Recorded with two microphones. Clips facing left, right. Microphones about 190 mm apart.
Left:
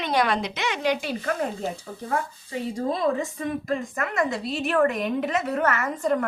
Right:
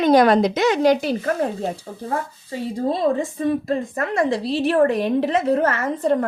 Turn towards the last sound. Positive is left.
turn(degrees=-30)  # may be behind; listen again after turning